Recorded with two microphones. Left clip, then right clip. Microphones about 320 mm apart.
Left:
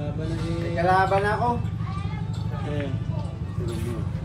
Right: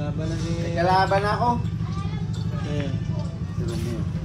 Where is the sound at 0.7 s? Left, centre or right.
Right.